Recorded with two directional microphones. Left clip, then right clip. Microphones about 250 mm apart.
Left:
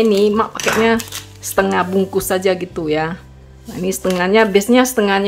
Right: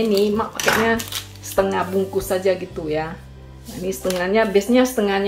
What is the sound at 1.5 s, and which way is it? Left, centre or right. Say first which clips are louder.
Speech: left 4 dB; left.